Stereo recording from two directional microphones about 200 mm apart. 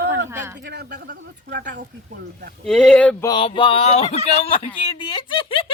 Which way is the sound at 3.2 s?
25° left (ahead or behind).